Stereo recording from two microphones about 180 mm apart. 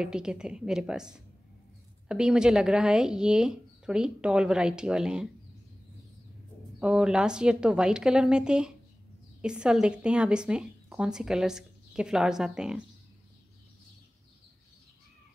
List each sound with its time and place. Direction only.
0.0 s a woman's voice: 5° right (ahead or behind)
6.8 s a woman's voice: 5° right (ahead or behind)